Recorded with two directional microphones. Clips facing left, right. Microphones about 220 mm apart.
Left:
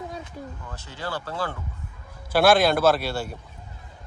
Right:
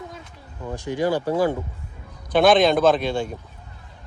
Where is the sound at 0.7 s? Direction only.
15° right (ahead or behind).